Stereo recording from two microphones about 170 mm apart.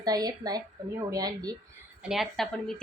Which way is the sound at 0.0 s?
20° right (ahead or behind).